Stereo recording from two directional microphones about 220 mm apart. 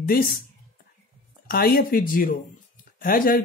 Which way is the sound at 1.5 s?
45° left (ahead or behind).